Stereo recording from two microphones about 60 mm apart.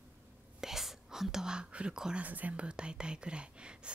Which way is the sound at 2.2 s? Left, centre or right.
Right.